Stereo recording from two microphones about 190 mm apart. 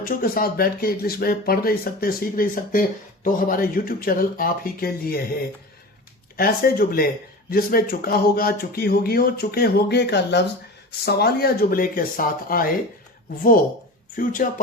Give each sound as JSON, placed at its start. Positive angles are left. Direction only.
{"t": 0.0, "sound": "speech", "side_deg": 50}
{"t": 6.3, "sound": "speech", "side_deg": 50}
{"t": 14.2, "sound": "speech", "side_deg": 45}